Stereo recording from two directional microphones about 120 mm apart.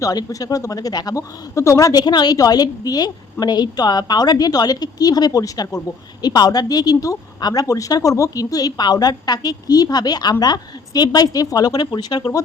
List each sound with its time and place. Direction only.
0.0 s a woman's voice: 30° left (ahead or behind)